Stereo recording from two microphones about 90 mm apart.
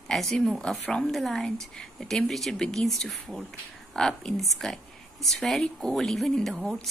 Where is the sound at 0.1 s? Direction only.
5° left (ahead or behind).